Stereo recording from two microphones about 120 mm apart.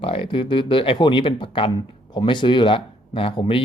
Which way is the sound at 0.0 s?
50° left (ahead or behind).